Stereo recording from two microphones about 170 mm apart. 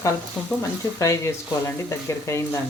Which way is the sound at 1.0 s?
15° left (ahead or behind).